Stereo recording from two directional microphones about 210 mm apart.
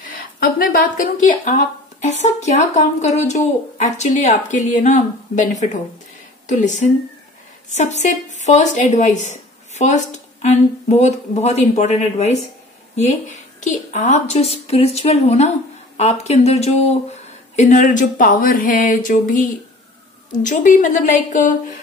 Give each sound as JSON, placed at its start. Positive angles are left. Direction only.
{"t": 0.0, "sound": "speech", "side_deg": 45}
{"t": 20.4, "sound": "speech", "side_deg": 35}